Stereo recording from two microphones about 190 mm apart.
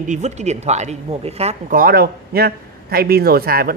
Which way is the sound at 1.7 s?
50° right (ahead or behind).